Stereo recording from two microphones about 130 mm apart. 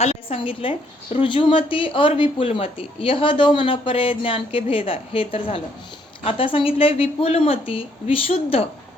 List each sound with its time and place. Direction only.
0.0 s a woman's voice: 50° left (ahead or behind)